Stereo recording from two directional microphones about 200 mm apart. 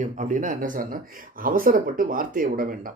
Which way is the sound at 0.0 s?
40° right (ahead or behind).